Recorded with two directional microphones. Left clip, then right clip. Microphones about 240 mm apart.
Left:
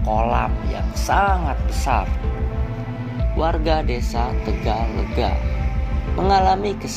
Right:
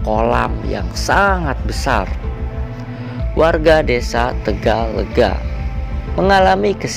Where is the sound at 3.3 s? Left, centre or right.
Right.